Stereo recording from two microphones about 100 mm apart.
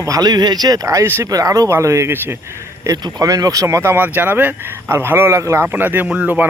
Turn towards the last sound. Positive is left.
turn(degrees=-15)  # may be behind; listen again after turning